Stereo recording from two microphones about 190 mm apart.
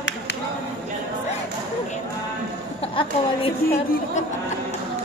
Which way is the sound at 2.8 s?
30° left (ahead or behind).